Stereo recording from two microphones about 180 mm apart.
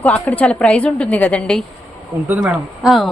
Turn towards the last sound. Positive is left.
turn(degrees=0)  # may be behind; listen again after turning